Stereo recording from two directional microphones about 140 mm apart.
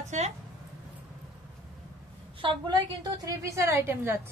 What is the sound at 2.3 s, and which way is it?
A woman's voice, 35° right (ahead or behind).